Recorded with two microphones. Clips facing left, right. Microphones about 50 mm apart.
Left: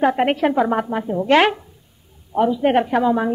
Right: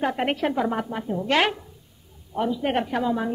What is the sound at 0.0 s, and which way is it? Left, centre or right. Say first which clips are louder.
A woman's voice: left 7 dB; left.